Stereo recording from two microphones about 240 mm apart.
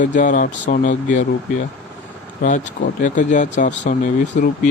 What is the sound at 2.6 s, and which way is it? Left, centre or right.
Speech, left.